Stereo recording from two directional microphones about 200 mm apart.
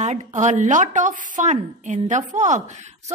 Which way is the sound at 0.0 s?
35° right (ahead or behind).